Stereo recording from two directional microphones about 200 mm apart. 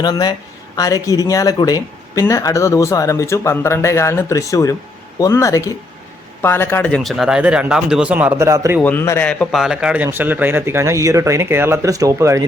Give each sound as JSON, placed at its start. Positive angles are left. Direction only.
{"t": 0.0, "sound": "speech", "side_deg": 20}
{"t": 8.8, "sound": "a man's voice", "side_deg": 10}